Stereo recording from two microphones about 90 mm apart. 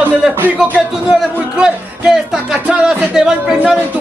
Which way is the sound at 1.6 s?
10° right (ahead or behind).